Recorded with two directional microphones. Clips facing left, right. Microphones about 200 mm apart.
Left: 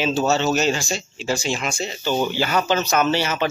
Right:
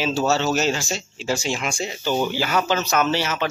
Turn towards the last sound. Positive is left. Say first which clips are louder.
# left 2 dB
turn(degrees=0)  # may be behind; listen again after turning